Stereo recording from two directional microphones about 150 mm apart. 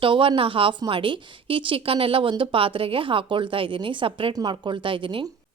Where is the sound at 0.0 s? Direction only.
35° right (ahead or behind).